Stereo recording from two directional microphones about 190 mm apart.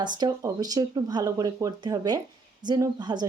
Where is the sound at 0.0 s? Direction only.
20° right (ahead or behind).